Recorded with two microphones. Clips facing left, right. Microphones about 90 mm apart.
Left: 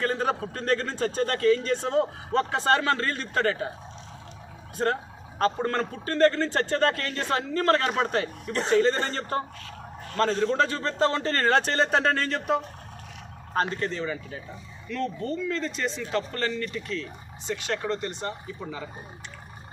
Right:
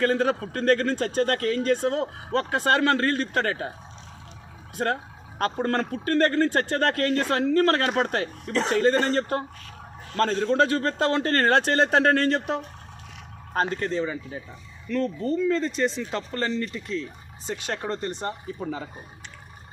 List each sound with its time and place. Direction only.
0.0 s a man's voice: 70° right (ahead or behind); by 3.7 s 45° right (ahead or behind)
5.4 s a man's voice: 55° right (ahead or behind)
8.5 s speech: 90° right
10.2 s a man's voice: 50° right (ahead or behind)
13.7 s speech: 40° right (ahead or behind)
14.0 s speech: 25° right (ahead or behind)
14.8 s speech: 35° right (ahead or behind)